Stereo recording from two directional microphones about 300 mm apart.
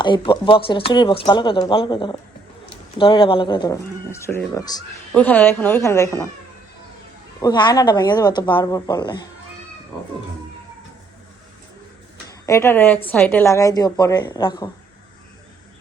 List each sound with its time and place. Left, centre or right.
0.0 s speech: centre
7.4 s speech: centre
12.5 s speech: centre